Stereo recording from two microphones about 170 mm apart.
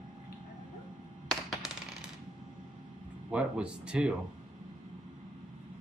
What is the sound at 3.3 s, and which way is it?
Speech, 5° right (ahead or behind).